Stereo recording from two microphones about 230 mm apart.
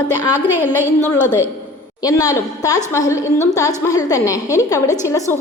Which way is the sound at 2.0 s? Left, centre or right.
Centre.